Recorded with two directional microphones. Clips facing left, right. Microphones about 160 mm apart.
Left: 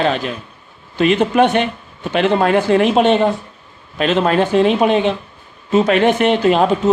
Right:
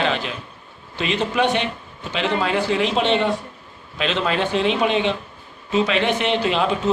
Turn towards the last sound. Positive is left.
turn(degrees=45)  # may be behind; listen again after turning